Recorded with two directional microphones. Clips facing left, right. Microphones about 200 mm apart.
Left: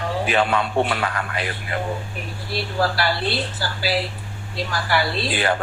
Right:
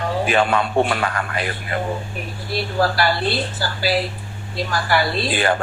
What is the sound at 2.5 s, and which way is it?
Speech, 45° right (ahead or behind).